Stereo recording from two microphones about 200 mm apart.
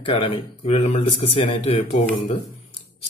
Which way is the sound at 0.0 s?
25° left (ahead or behind).